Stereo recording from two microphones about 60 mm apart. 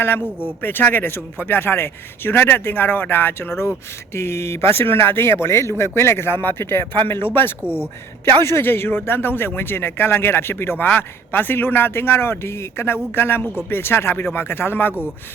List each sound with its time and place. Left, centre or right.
0.0 s a man's voice: left